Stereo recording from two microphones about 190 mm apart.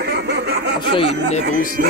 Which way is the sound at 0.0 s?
60° right (ahead or behind).